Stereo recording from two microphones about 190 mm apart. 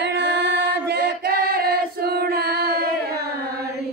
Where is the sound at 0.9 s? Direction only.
55° right (ahead or behind).